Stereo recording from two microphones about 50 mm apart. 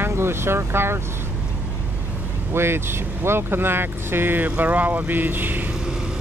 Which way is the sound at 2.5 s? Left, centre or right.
Right.